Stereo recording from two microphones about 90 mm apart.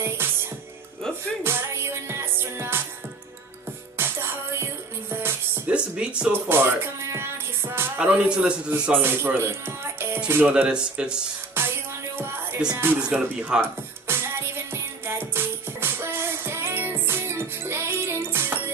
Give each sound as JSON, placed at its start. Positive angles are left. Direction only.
{"t": 1.4, "sound": "music", "side_deg": -25}
{"t": 4.0, "sound": "music", "side_deg": -25}
{"t": 5.7, "sound": "a man's voice", "side_deg": -10}
{"t": 6.5, "sound": "music", "side_deg": -25}
{"t": 8.0, "sound": "a man's voice", "side_deg": -10}
{"t": 9.0, "sound": "speech", "side_deg": -25}
{"t": 11.6, "sound": "music", "side_deg": -25}
{"t": 12.7, "sound": "speech", "side_deg": -25}
{"t": 13.0, "sound": "a man's voice", "side_deg": -10}
{"t": 14.1, "sound": "music", "side_deg": -25}